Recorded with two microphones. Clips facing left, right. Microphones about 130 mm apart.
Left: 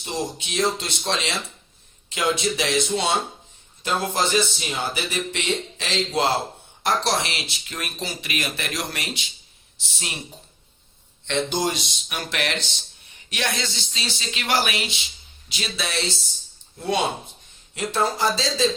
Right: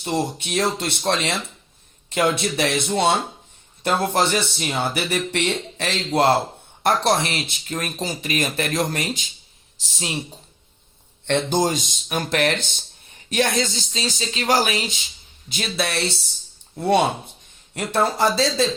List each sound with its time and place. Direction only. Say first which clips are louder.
0.0 s speech: right 5 dB; 60° right (ahead or behind); by 9.3 s 45° right (ahead or behind)
11.3 s speech: right 4 dB; 50° right (ahead or behind)
15.4 s speech: right 5 dB; 55° right (ahead or behind)